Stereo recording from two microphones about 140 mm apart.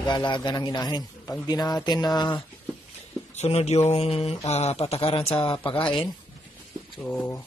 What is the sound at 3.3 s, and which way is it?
Speech, 50° left (ahead or behind).